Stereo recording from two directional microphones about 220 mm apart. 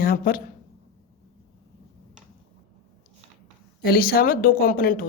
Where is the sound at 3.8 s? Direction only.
45° left (ahead or behind).